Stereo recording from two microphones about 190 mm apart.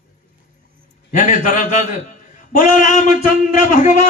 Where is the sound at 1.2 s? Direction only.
45° left (ahead or behind).